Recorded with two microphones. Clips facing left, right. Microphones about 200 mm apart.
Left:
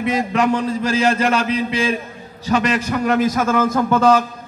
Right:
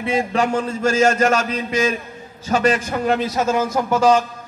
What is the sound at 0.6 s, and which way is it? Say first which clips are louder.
Speech: right 1 dB; 35° left (ahead or behind).